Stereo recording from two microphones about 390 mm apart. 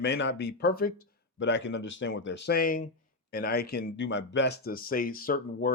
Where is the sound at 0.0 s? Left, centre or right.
Left.